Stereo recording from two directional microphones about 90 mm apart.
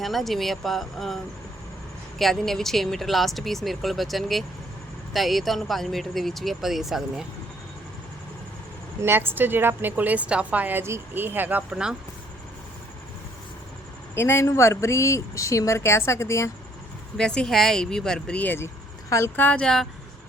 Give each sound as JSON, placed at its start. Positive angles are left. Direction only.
{"t": 0.0, "sound": "speech", "side_deg": 0}
{"t": 9.0, "sound": "a woman's voice", "side_deg": -25}
{"t": 14.2, "sound": "speech", "side_deg": 25}
{"t": 17.2, "sound": "speech", "side_deg": 10}